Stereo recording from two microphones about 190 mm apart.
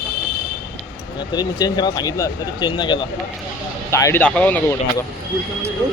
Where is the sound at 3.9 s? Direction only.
15° left (ahead or behind).